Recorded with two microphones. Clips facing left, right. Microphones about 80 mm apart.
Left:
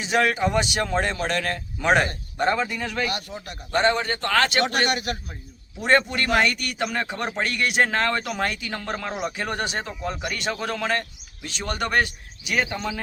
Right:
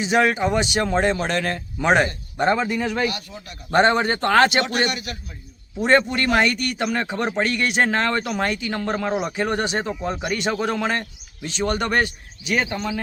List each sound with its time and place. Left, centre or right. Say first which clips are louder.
0.0 s a man's voice: right 3 dB; centre
3.7 s a man's voice: right 4 dB; right
4.9 s a man's voice: left 3 dB; left
5.9 s speech: right 2 dB; centre
9.8 s a man's voice: right 4 dB; centre
11.4 s speech: right 5 dB; centre